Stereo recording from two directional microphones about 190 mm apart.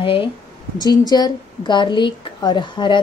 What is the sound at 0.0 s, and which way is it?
A woman's voice, 25° left (ahead or behind).